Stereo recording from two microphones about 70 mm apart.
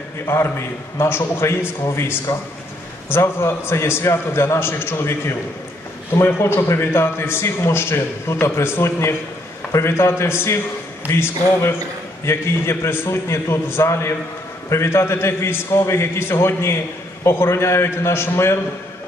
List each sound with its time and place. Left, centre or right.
0.2 s a man's voice: left